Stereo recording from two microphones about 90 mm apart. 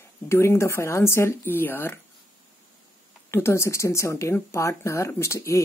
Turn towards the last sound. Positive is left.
turn(degrees=30)  # may be behind; listen again after turning